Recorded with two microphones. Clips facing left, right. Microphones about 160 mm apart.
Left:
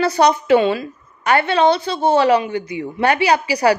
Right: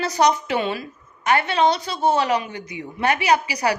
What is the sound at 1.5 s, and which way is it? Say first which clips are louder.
A woman's voice: left 4 dB; 30° left (ahead or behind).